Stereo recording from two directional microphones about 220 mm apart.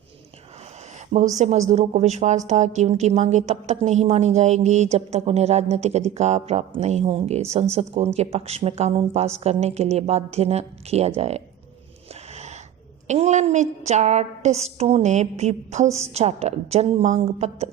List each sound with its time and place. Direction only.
1.4 s a woman's voice: 30° right (ahead or behind)
12.3 s a sound: 30° right (ahead or behind)
13.1 s a woman's voice: 30° right (ahead or behind)